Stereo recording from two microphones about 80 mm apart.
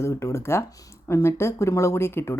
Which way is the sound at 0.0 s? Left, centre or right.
Left.